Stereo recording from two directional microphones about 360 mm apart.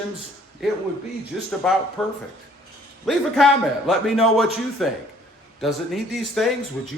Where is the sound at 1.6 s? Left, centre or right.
Centre.